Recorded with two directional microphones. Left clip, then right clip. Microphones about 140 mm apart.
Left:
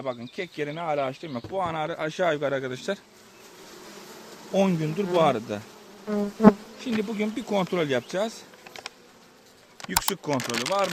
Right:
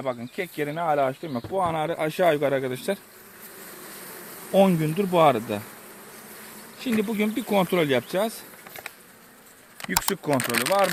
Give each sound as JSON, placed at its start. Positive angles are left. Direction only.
{"t": 0.0, "sound": "speech", "side_deg": 0}
{"t": 1.5, "sound": "speech", "side_deg": -30}
{"t": 2.7, "sound": "speech", "side_deg": 0}
{"t": 4.5, "sound": "speech", "side_deg": -5}
{"t": 6.7, "sound": "speech", "side_deg": -15}
{"t": 9.9, "sound": "speech", "side_deg": 0}
{"t": 10.3, "sound": "speech", "side_deg": 20}